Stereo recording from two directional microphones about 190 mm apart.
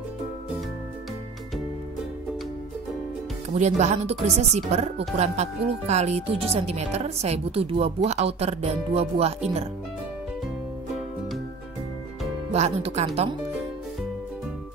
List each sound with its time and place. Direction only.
3.5 s speech: 35° right (ahead or behind)
12.5 s speech: 35° right (ahead or behind)